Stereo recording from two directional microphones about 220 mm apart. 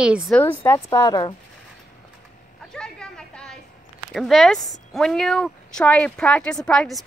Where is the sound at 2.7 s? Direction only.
5° left (ahead or behind).